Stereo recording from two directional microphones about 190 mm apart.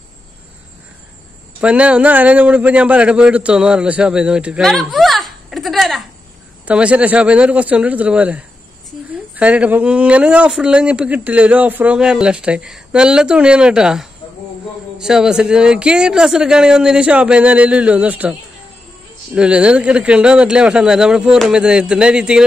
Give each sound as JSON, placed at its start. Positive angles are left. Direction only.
{"t": 1.6, "sound": "a man's voice", "side_deg": -5}
{"t": 19.3, "sound": "speech", "side_deg": -5}